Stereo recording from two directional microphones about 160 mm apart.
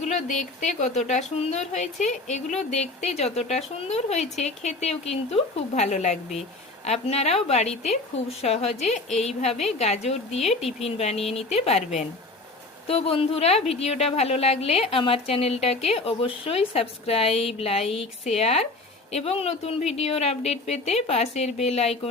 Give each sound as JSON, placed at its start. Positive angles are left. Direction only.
{"t": 0.0, "sound": "a woman's voice", "side_deg": 50}